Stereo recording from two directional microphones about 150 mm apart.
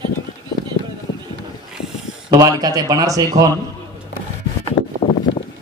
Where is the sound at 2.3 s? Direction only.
25° right (ahead or behind).